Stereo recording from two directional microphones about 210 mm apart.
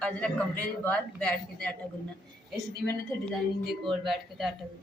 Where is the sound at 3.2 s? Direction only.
5° left (ahead or behind).